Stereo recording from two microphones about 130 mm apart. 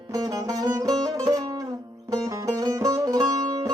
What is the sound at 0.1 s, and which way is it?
Music, 30° right (ahead or behind).